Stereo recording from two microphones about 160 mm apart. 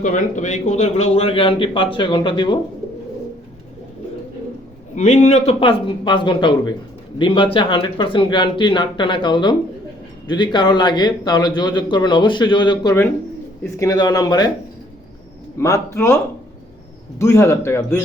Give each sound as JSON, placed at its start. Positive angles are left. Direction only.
{"t": 0.0, "sound": "a man's voice", "side_deg": 50}
{"t": 4.9, "sound": "a man's voice", "side_deg": 45}
{"t": 15.5, "sound": "a man's voice", "side_deg": 15}
{"t": 17.2, "sound": "a man's voice", "side_deg": 15}